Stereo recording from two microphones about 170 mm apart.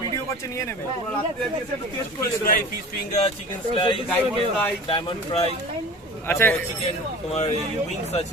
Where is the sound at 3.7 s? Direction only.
30° left (ahead or behind).